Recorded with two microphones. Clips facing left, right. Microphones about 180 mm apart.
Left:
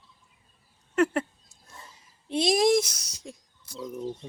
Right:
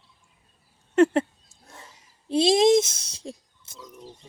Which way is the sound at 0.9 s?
25° right (ahead or behind).